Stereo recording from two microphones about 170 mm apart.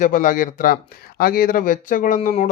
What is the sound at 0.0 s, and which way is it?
Speech, 50° left (ahead or behind).